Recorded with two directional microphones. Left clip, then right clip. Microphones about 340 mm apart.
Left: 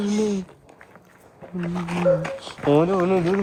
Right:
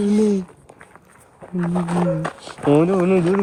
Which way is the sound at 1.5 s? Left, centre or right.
Centre.